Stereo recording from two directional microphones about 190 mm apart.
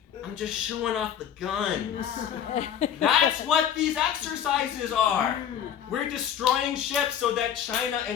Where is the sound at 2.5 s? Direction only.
35° left (ahead or behind).